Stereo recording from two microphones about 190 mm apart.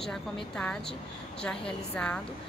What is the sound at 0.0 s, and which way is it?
Speech, centre (ahead or behind).